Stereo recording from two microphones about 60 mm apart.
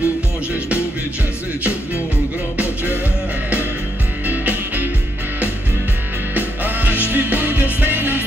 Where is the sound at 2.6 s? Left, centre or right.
Left.